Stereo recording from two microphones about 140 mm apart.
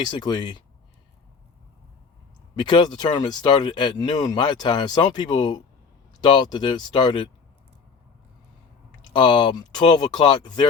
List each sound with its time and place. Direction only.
0.0 s speech: 30° left (ahead or behind)
2.6 s speech: 30° left (ahead or behind)
9.1 s speech: 35° left (ahead or behind)